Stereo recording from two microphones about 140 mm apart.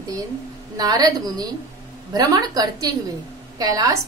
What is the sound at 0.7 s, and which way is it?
A woman's voice, 25° right (ahead or behind).